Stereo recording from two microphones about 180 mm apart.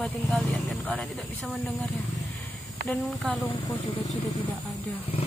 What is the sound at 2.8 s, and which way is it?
Speech, 5° left (ahead or behind).